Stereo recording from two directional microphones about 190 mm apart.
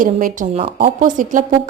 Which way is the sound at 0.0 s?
45° right (ahead or behind).